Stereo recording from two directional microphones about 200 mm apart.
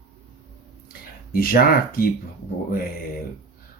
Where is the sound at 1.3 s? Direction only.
45° left (ahead or behind).